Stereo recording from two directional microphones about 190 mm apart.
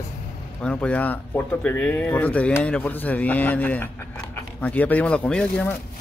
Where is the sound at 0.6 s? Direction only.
5° left (ahead or behind).